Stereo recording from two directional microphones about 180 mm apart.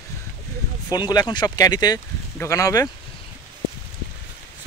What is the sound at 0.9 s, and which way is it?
Speech, 20° left (ahead or behind).